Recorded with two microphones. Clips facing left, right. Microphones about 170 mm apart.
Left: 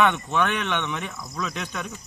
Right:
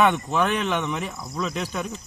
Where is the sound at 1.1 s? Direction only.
25° right (ahead or behind).